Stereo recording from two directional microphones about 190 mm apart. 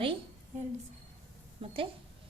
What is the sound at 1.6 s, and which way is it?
Speech, 30° right (ahead or behind).